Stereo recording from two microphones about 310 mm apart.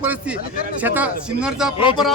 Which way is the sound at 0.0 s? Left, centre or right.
Centre.